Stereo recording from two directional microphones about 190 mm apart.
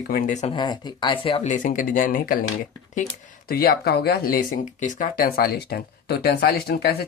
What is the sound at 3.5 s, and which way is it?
Speech, 50° left (ahead or behind).